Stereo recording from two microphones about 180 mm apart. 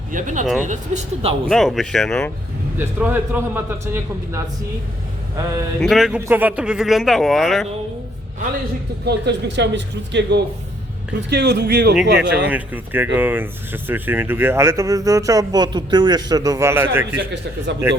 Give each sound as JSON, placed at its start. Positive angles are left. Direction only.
{"t": 0.1, "sound": "speech", "side_deg": -45}
{"t": 1.5, "sound": "speech", "side_deg": 0}
{"t": 2.7, "sound": "speech", "side_deg": -10}
{"t": 5.8, "sound": "speech", "side_deg": 0}
{"t": 9.0, "sound": "speech", "side_deg": -70}
{"t": 11.3, "sound": "speech", "side_deg": -65}
{"t": 12.5, "sound": "speech", "side_deg": -10}